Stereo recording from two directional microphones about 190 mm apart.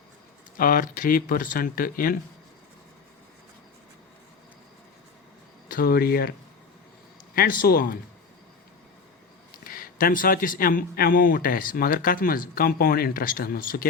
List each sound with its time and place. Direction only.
0.5 s a man's voice: 50° left (ahead or behind)
5.6 s a man's voice: 50° left (ahead or behind)
7.6 s a man's voice: 50° left (ahead or behind)
9.6 s a man's voice: 50° left (ahead or behind)